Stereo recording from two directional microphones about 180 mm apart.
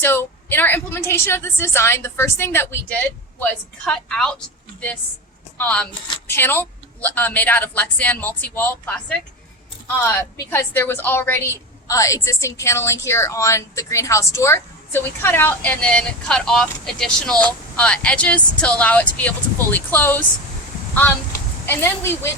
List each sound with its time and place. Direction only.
0.0 s a woman's voice: 10° left (ahead or behind)
21.7 s a woman's voice: 10° left (ahead or behind)